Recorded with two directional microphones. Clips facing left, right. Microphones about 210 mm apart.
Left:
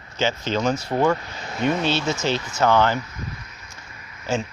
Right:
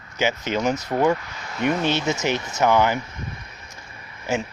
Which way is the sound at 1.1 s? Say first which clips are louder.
Left 1 dB; 30° left (ahead or behind).